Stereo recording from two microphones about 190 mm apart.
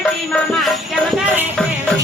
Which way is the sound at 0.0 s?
Centre (ahead or behind).